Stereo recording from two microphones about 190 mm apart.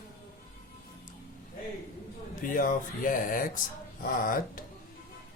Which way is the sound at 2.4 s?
45° left (ahead or behind).